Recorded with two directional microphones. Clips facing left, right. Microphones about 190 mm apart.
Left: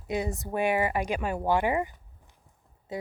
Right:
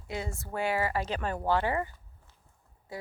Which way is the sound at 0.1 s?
15° left (ahead or behind).